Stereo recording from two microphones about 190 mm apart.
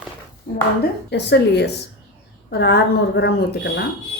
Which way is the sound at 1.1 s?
65° left (ahead or behind).